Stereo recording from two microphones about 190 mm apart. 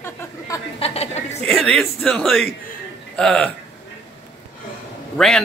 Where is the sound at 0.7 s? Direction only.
30° left (ahead or behind).